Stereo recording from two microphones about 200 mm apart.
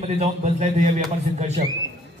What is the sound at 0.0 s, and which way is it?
A man's voice, 35° right (ahead or behind).